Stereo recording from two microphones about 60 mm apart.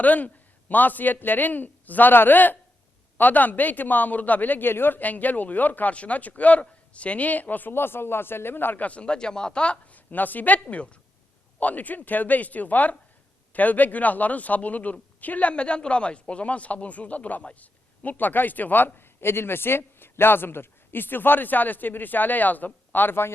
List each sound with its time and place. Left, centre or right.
0.0 s a man's voice: left